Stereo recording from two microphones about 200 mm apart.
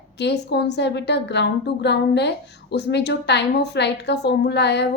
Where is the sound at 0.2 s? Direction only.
55° left (ahead or behind).